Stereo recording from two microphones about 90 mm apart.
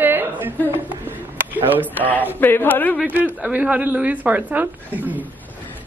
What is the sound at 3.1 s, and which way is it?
A woman's voice, 15° right (ahead or behind).